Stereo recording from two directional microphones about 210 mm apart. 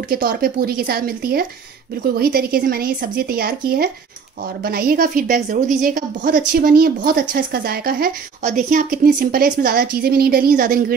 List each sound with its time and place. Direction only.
0.1 s a woman's voice: 45° right (ahead or behind)